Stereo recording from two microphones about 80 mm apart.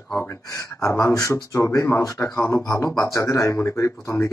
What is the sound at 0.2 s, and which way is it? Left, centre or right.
Speech, left.